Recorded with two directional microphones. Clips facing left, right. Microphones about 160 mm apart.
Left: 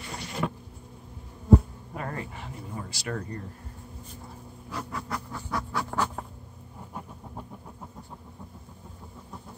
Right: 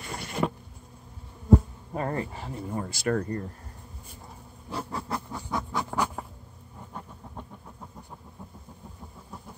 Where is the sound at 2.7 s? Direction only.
50° right (ahead or behind).